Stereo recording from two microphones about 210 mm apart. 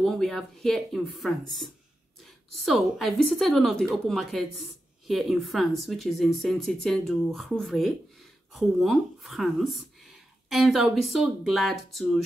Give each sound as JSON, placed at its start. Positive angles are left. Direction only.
{"t": 0.0, "sound": "a woman's voice", "side_deg": 0}